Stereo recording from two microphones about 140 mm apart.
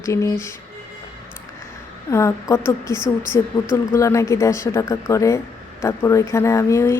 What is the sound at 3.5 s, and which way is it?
Speech, 35° left (ahead or behind).